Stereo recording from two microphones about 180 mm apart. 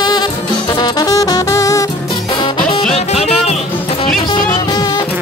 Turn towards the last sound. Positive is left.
turn(degrees=35)  # may be behind; listen again after turning